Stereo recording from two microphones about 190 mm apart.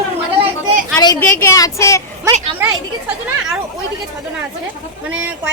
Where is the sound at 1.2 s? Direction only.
15° left (ahead or behind).